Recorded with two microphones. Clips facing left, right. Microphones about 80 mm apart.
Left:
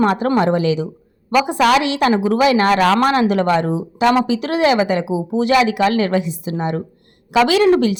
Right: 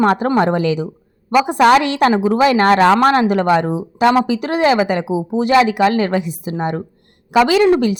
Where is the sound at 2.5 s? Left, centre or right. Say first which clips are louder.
Right 3 dB; right.